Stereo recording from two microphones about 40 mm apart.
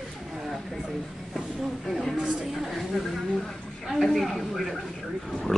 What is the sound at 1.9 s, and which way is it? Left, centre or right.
Speech, centre.